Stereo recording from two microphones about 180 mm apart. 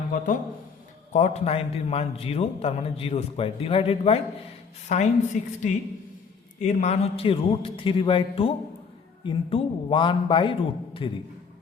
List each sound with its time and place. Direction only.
1.1 s a man's voice: 40° left (ahead or behind)